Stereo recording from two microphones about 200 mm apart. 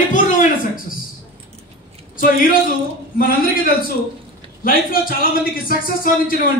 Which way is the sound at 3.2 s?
45° left (ahead or behind).